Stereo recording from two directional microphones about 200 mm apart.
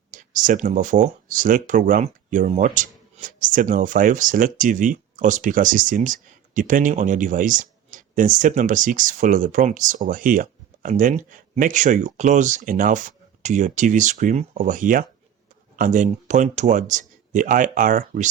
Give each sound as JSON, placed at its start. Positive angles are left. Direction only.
{"t": 0.1, "sound": "speech", "side_deg": -40}